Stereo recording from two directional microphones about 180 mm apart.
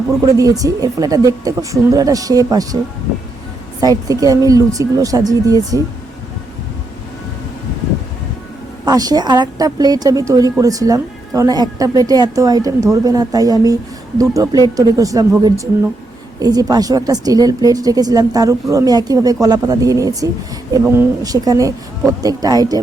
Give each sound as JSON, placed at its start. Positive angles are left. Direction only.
{"t": 0.2, "sound": "a woman's voice", "side_deg": -20}
{"t": 3.8, "sound": "a woman's voice", "side_deg": -20}
{"t": 8.8, "sound": "a woman's voice", "side_deg": -20}